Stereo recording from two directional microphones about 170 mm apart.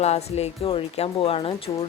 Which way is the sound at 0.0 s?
40° left (ahead or behind).